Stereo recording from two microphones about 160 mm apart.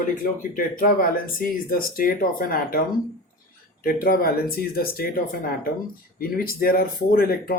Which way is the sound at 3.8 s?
65° left (ahead or behind).